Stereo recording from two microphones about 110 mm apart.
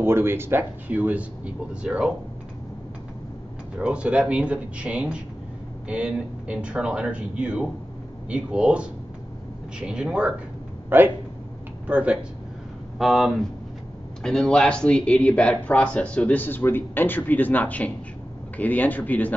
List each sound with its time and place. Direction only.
0.0 s speech: 20° right (ahead or behind)
3.7 s speech: 10° right (ahead or behind); by 19.3 s 15° left (ahead or behind)